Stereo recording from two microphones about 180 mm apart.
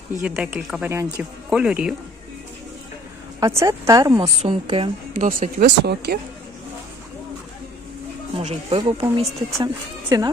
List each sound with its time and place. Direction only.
0.2 s speech: 5° right (ahead or behind)
3.4 s speech: 15° right (ahead or behind)
4.6 s speech: 30° right (ahead or behind)
5.1 s speech: 45° right (ahead or behind)
5.6 s speech: 65° right (ahead or behind)
8.4 s speech: 40° right (ahead or behind)
8.8 s speech: 20° right (ahead or behind)